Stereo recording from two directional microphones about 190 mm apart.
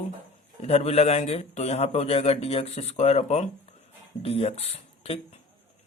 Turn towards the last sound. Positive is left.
turn(degrees=35)  # may be behind; listen again after turning